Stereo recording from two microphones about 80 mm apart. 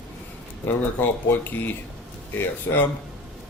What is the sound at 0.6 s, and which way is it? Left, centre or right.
Speech, left.